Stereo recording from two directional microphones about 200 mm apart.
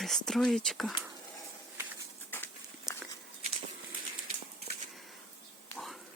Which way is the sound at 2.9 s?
15° left (ahead or behind).